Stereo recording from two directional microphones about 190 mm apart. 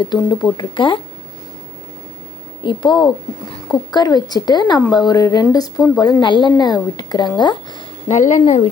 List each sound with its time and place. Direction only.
0.0 s speech: 25° left (ahead or behind)
2.6 s speech: 25° left (ahead or behind)
8.0 s speech: 40° left (ahead or behind)